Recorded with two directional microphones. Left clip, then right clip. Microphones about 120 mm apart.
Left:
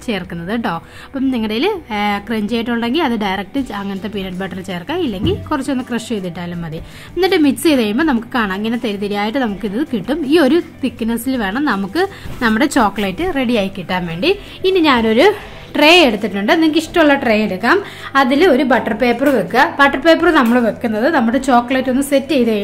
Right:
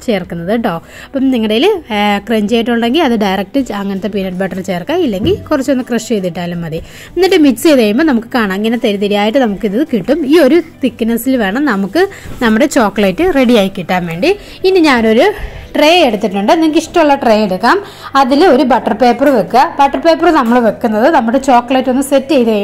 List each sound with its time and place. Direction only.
0.0 s a woman's voice: 30° right (ahead or behind)
14.0 s a woman's voice: 20° right (ahead or behind)
14.6 s a woman's voice: 40° right (ahead or behind)
15.0 s a woman's voice: 20° right (ahead or behind)
17.6 s speech: 10° left (ahead or behind)
18.2 s a woman's voice: 25° right (ahead or behind)
20.6 s a woman's voice: 10° left (ahead or behind)
21.0 s a woman's voice: 15° right (ahead or behind)